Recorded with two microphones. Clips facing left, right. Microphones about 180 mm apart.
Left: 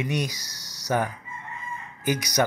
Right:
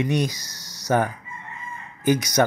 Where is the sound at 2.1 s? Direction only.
50° right (ahead or behind).